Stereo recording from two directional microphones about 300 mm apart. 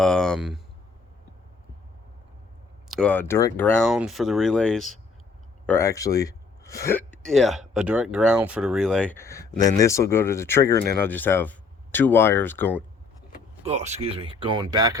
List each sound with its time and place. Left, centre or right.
0.0 s speech: centre
2.9 s speech: centre
13.6 s speech: right